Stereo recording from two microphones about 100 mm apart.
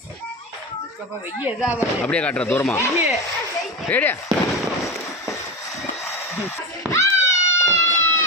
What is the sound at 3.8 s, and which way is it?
Speech, 20° left (ahead or behind).